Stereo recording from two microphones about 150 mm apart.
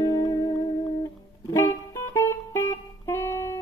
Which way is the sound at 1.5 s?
20° left (ahead or behind).